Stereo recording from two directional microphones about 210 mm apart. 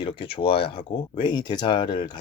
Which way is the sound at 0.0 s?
25° left (ahead or behind).